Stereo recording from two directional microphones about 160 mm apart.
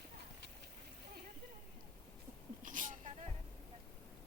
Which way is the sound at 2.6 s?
55° right (ahead or behind).